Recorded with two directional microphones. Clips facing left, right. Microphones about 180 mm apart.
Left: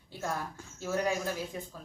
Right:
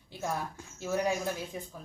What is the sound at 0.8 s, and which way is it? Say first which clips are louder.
Speech: right 1 dB; 15° right (ahead or behind).